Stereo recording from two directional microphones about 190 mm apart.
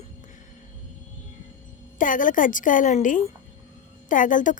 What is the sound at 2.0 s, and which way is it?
A woman's voice, 45° left (ahead or behind).